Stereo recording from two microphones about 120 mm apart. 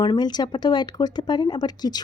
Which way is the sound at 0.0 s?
35° left (ahead or behind).